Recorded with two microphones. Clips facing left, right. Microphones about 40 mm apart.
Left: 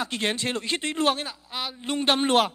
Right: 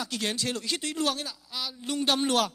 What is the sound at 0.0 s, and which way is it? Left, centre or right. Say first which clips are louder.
Speech: left 4 dB; left.